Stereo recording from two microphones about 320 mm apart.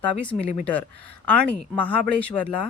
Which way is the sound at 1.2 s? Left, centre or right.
Centre.